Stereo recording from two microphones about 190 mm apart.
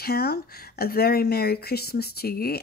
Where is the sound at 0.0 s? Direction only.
55° left (ahead or behind).